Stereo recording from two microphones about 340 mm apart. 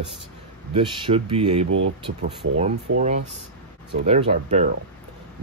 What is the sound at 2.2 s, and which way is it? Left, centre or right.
Speech, right.